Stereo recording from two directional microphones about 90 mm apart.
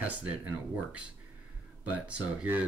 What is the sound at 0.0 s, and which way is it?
Speech, 15° right (ahead or behind).